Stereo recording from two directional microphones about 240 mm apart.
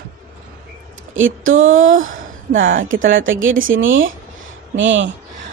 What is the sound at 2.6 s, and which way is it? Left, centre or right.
Speech, right.